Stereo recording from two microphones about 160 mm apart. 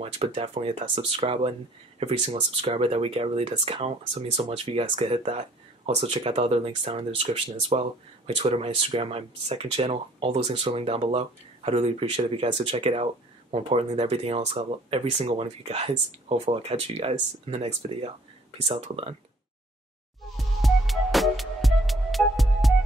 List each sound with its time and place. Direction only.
0.0 s speech: 40° right (ahead or behind)
20.3 s music: centre (ahead or behind)